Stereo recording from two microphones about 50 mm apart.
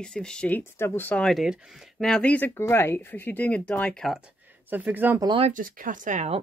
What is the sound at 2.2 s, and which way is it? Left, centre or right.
Speech, left.